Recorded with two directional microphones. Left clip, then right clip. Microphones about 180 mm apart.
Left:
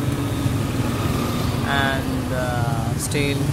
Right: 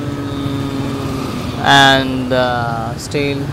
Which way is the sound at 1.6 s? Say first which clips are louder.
Right 14 dB; 55° right (ahead or behind).